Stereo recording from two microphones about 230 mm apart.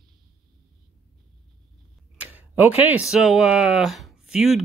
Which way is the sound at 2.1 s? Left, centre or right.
Centre.